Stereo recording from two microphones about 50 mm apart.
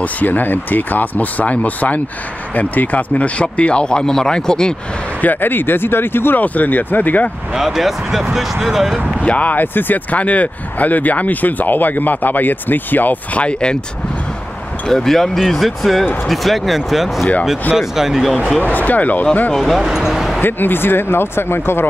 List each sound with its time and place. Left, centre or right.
0.2 s speech: left; by 4.7 s centre
5.2 s speech: left
6.4 s speech: left
7.5 s speech: centre
9.2 s speech: left
10.2 s speech: left
14.9 s speech: centre
18.6 s speech: left
19.5 s speech: centre
19.9 s speech: centre
20.3 s speech: left